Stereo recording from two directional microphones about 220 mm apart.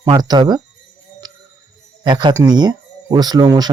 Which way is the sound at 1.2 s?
20° right (ahead or behind).